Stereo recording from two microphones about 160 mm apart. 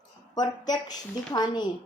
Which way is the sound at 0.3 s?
25° left (ahead or behind).